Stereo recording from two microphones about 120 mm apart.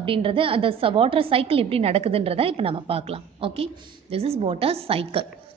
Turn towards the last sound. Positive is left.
turn(degrees=-50)  # may be behind; listen again after turning